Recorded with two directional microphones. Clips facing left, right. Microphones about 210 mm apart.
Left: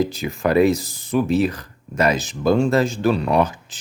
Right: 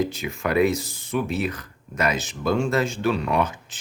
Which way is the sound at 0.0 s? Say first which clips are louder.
Left 4 dB; 35° left (ahead or behind).